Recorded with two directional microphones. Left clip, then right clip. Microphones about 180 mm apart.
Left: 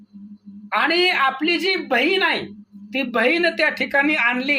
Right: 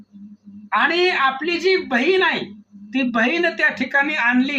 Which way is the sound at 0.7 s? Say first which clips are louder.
Right 1 dB; 45° left (ahead or behind).